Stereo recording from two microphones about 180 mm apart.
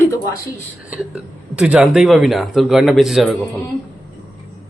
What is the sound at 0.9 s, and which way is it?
Speech, 5° right (ahead or behind).